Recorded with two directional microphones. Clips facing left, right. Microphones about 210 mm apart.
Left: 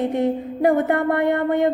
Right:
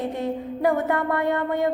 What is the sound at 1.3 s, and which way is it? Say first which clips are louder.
Speech: left 4 dB; 20° left (ahead or behind).